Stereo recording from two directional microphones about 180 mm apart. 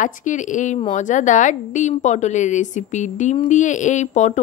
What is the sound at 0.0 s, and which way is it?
A woman's voice, 45° left (ahead or behind).